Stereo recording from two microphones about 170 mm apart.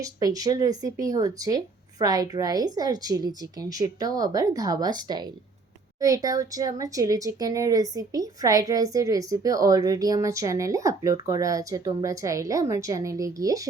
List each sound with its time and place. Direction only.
0.0 s speech: 20° right (ahead or behind)